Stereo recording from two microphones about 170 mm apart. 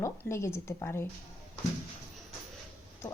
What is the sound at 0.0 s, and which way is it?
Speech, 15° left (ahead or behind).